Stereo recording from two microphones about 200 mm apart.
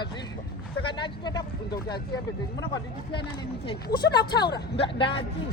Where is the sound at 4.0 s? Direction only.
55° left (ahead or behind).